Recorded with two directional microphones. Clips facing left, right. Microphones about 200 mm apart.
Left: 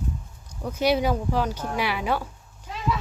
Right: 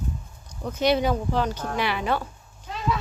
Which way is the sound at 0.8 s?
5° left (ahead or behind).